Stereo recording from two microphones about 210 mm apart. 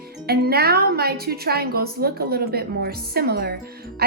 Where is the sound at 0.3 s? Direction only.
50° right (ahead or behind).